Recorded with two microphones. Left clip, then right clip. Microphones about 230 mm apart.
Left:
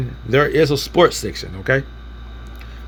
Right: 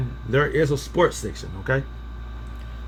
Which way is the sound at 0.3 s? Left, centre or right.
Centre.